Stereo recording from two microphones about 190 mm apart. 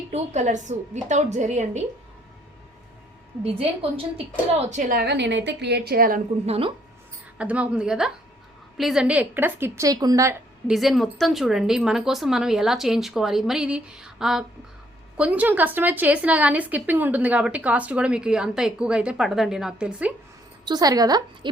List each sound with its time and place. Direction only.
0.1 s a woman's voice: 40° right (ahead or behind)
3.4 s a woman's voice: 30° right (ahead or behind); by 6.2 s 50° right (ahead or behind)
6.4 s a woman's voice: 30° right (ahead or behind)
7.3 s a woman's voice: 5° right (ahead or behind)
10.7 s a woman's voice: centre (ahead or behind)
20.7 s a woman's voice: 20° right (ahead or behind)